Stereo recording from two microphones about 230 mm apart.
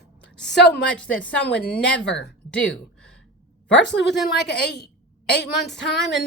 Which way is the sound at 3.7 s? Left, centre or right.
Left.